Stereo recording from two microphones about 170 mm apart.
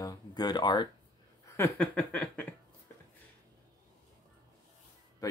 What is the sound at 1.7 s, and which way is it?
Speech, 10° left (ahead or behind).